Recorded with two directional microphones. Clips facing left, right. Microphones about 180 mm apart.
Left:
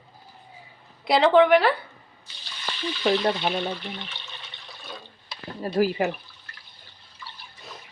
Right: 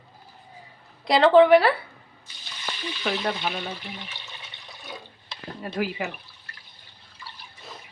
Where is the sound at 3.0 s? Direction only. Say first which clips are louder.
Left 5 dB; 35° left (ahead or behind).